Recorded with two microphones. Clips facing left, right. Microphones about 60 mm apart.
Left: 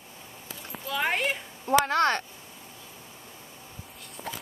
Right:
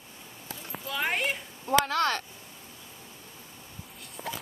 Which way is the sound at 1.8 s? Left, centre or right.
Left.